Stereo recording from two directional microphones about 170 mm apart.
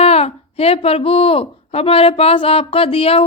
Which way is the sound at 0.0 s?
35° left (ahead or behind).